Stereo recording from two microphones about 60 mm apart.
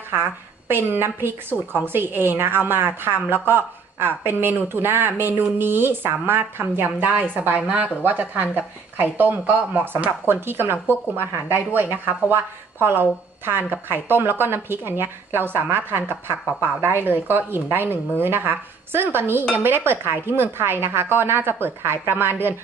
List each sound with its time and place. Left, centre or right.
0.1 s a woman's voice: right
10.2 s a woman's voice: right